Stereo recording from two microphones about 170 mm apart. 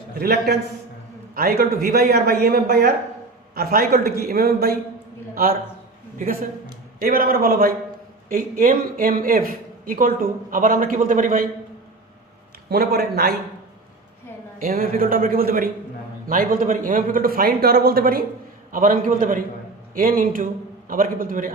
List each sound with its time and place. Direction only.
0.2 s a man's voice: 65° right (ahead or behind); by 11.4 s 50° right (ahead or behind)
12.7 s a man's voice: 65° right (ahead or behind)
14.6 s a man's voice: 55° right (ahead or behind)